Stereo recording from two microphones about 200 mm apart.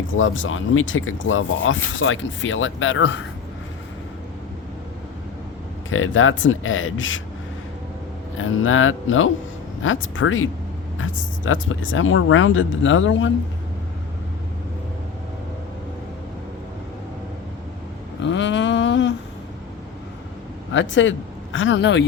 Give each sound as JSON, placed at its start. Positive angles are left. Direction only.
{"t": 0.1, "sound": "speech", "side_deg": 75}
{"t": 5.9, "sound": "speech", "side_deg": 90}
{"t": 8.4, "sound": "speech", "side_deg": 85}
{"t": 18.2, "sound": "a sound", "side_deg": 65}
{"t": 20.7, "sound": "speech", "side_deg": 70}